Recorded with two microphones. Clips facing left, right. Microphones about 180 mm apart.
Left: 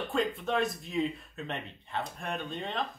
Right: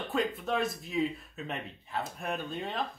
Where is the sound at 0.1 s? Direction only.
Centre (ahead or behind).